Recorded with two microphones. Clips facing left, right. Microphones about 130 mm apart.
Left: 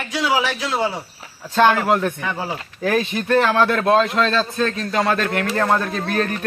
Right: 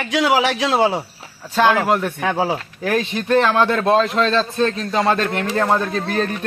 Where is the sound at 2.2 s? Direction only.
65° right (ahead or behind).